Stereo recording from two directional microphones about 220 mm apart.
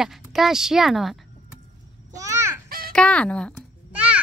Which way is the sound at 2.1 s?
15° right (ahead or behind).